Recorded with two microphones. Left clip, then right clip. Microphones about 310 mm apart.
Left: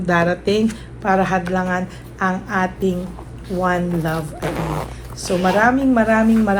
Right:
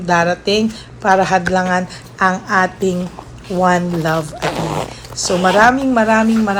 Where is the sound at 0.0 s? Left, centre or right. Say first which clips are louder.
Right 3 dB; centre; by 4.9 s right.